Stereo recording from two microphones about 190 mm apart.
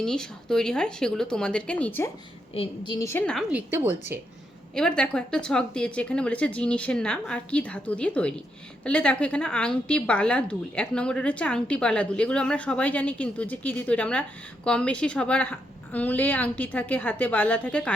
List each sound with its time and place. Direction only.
0.0 s speech: 5° left (ahead or behind)
2.5 s a woman's voice: 30° left (ahead or behind)
2.9 s a woman's voice: 15° left (ahead or behind)
3.5 s a woman's voice: 15° right (ahead or behind)
4.7 s a woman's voice: 5° left (ahead or behind)